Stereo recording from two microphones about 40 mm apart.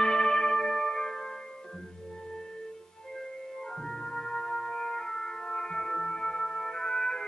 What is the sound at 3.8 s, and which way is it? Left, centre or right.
Music, centre.